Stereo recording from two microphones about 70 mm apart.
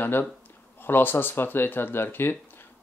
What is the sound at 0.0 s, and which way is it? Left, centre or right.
Speech, left.